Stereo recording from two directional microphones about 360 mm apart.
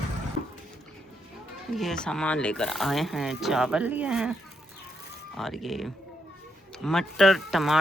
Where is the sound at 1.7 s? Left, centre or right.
Centre.